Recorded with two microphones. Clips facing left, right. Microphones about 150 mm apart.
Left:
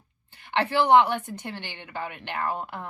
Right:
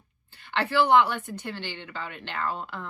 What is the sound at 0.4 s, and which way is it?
Speech, 20° left (ahead or behind).